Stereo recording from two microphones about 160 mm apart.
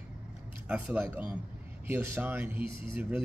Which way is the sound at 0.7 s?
10° right (ahead or behind).